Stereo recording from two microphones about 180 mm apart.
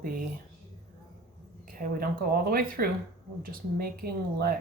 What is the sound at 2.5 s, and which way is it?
Speech, 55° right (ahead or behind).